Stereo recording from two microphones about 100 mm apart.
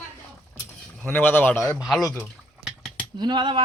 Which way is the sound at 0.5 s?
15° left (ahead or behind).